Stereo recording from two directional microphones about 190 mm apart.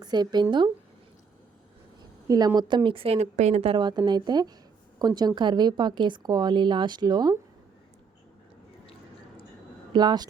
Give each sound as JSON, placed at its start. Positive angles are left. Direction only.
{"t": 0.0, "sound": "speech", "side_deg": -20}
{"t": 2.2, "sound": "speech", "side_deg": -20}
{"t": 9.9, "sound": "speech", "side_deg": -20}